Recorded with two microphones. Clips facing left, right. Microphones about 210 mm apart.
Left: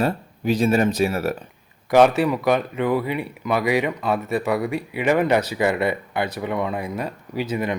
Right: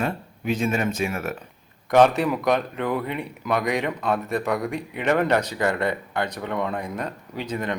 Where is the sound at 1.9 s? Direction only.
5° left (ahead or behind).